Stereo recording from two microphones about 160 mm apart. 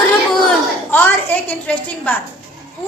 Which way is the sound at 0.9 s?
10° left (ahead or behind).